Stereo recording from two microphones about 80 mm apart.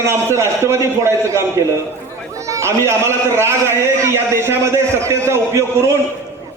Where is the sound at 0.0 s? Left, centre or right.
Right.